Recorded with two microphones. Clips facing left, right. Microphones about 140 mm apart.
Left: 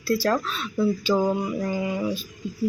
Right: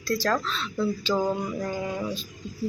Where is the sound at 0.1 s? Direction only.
10° left (ahead or behind).